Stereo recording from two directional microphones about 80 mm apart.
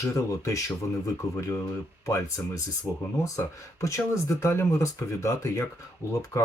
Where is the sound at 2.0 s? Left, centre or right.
Left.